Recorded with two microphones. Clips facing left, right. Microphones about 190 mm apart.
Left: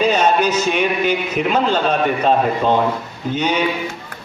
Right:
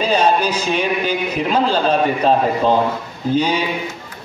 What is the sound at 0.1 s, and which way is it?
Music, 35° right (ahead or behind).